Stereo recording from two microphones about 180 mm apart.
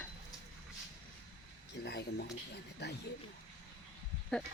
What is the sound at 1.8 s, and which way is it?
Speech, 60° left (ahead or behind).